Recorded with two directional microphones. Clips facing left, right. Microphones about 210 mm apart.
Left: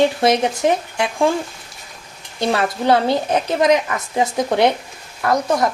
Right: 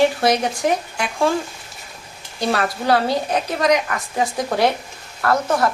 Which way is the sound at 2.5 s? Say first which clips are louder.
Left 2 dB; 20° left (ahead or behind).